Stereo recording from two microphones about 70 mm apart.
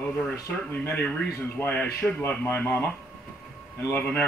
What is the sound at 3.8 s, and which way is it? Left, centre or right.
Speech, left.